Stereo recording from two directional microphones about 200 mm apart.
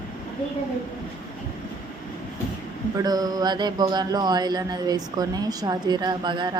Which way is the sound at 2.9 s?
20° right (ahead or behind).